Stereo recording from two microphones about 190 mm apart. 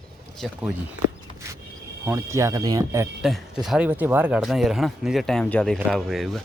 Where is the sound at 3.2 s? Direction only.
Centre (ahead or behind).